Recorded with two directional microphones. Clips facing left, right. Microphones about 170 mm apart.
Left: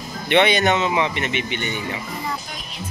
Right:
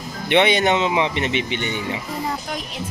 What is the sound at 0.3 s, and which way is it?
Speech, 20° right (ahead or behind).